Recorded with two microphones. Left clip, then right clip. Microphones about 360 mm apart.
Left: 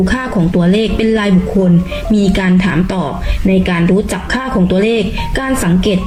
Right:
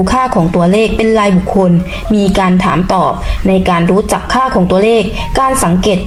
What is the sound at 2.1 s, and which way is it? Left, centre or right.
Speech, right.